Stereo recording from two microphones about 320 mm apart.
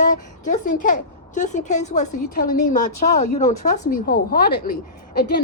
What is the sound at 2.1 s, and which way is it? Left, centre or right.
Speech, left.